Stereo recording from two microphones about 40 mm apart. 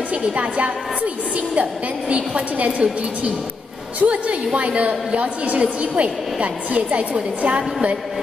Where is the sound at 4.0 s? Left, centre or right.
Right.